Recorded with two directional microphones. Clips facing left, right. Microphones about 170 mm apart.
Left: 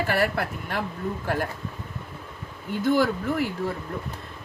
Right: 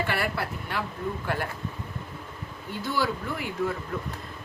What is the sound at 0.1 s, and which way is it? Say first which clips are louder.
Speech: left 4 dB; 45° left (ahead or behind).